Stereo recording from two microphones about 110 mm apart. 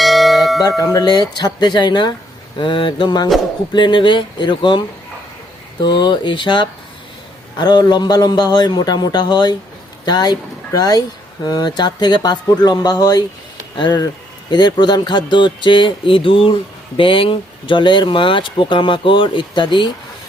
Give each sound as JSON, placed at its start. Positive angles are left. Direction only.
{"t": 0.0, "sound": "bell", "side_deg": 0}
{"t": 0.8, "sound": "a man's voice", "side_deg": 35}
{"t": 5.8, "sound": "a man's voice", "side_deg": 45}